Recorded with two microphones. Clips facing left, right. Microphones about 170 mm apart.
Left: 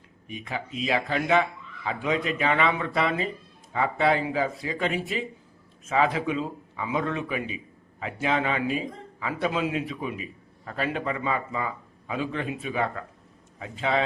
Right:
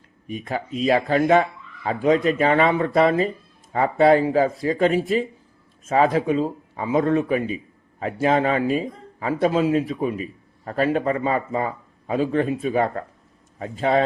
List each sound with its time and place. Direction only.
0.3 s speech: 45° right (ahead or behind)